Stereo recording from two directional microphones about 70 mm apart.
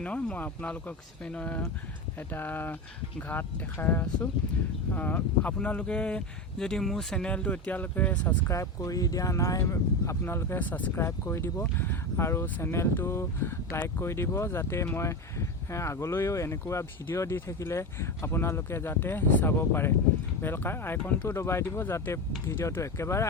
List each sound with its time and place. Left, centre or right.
0.0 s speech: centre
8.4 s speech: left
10.9 s speech: left
11.6 s speech: left
12.1 s speech: left
21.0 s speech: left
21.2 s speech: left